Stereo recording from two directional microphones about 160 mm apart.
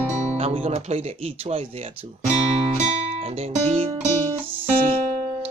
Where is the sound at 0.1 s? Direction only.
45° right (ahead or behind).